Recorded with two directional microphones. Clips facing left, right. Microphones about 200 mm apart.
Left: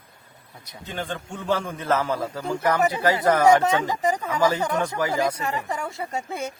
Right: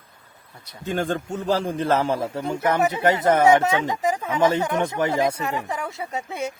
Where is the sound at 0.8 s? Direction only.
45° right (ahead or behind); by 3.4 s 25° right (ahead or behind).